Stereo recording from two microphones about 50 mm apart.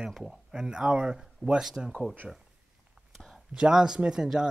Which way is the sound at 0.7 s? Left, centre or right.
Right.